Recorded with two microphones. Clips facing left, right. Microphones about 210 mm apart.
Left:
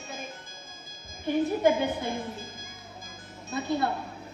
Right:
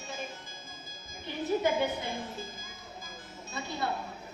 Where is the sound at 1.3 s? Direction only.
50° left (ahead or behind).